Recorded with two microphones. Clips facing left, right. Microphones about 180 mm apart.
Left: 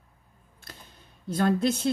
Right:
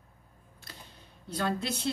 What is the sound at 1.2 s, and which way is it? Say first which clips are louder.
Speech: left 8 dB; 50° left (ahead or behind).